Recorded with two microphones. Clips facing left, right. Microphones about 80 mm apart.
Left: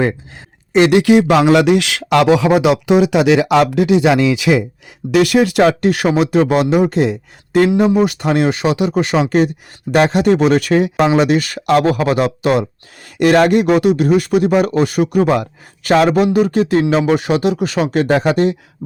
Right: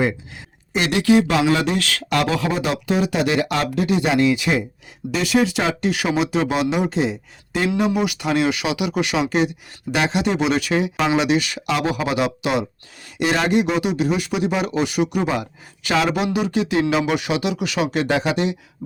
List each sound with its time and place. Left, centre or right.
1.5 s speech: left
5.1 s speech: left
7.8 s speech: left